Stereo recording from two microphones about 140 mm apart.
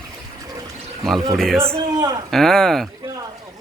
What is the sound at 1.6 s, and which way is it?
Speech, 20° right (ahead or behind).